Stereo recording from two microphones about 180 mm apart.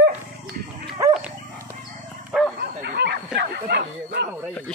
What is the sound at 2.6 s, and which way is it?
Bow-wow, 65° right (ahead or behind).